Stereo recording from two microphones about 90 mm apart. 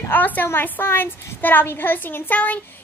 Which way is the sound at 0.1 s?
20° left (ahead or behind).